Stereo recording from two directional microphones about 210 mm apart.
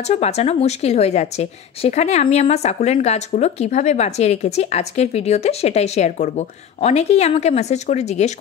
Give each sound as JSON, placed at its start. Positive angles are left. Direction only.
{"t": 0.1, "sound": "a woman's voice", "side_deg": 30}